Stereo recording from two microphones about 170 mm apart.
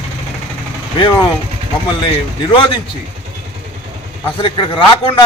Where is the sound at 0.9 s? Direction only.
25° left (ahead or behind).